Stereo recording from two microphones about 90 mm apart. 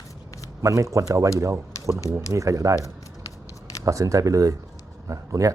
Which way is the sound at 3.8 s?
35° right (ahead or behind).